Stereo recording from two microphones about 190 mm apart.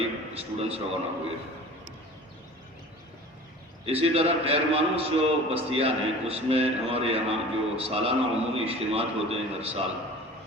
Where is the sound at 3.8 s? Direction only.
30° right (ahead or behind).